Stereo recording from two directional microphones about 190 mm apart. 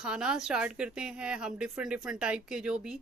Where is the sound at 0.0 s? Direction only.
5° right (ahead or behind).